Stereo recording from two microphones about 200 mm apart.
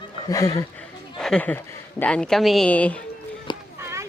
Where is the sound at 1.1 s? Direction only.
5° left (ahead or behind).